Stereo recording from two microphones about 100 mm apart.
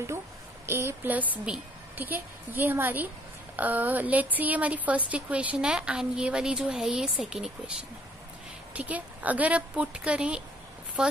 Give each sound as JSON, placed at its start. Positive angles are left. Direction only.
{"t": 0.7, "sound": "a woman's voice", "side_deg": -25}
{"t": 8.7, "sound": "a woman's voice", "side_deg": -15}